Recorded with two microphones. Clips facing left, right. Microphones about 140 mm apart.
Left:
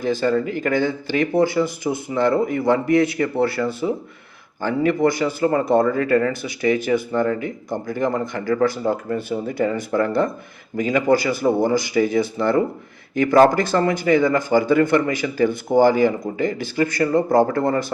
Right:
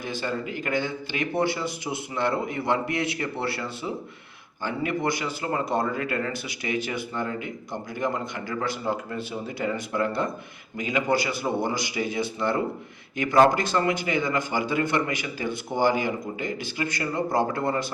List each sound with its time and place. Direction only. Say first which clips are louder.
0.0 s speech: left 10 dB; 45° left (ahead or behind)